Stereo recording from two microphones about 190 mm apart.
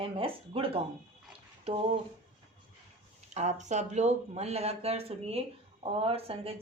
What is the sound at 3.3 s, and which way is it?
A woman's voice, 35° right (ahead or behind).